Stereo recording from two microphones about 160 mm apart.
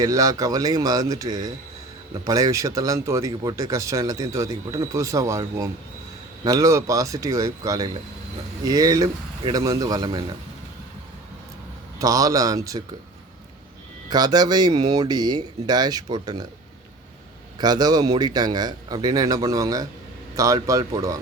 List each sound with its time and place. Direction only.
0.0 s speech: 20° right (ahead or behind)
11.9 s speech: 20° right (ahead or behind)
14.1 s speech: 25° right (ahead or behind)
17.6 s speech: 25° right (ahead or behind)